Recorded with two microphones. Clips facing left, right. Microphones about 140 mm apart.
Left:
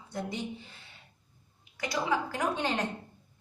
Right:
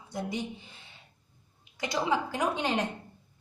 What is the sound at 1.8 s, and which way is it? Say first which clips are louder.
A woman's voice: right 1 dB; 20° right (ahead or behind).